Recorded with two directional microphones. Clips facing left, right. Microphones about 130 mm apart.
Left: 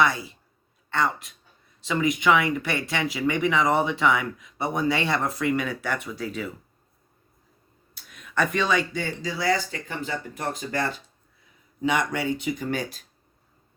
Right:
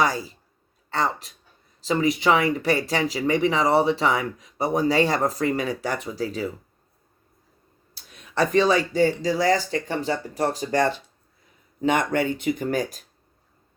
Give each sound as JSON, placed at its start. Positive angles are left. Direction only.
{"t": 0.0, "sound": "speech", "side_deg": -40}
{"t": 7.9, "sound": "speech", "side_deg": -35}
{"t": 11.8, "sound": "speech", "side_deg": -45}